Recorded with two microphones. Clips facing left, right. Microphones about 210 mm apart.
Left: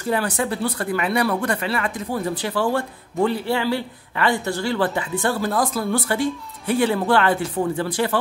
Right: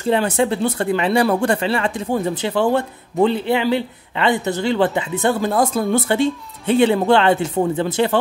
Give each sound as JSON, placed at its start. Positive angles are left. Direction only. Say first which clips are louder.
{"t": 0.0, "sound": "speech", "louder": "right 5 dB", "side_deg": -25}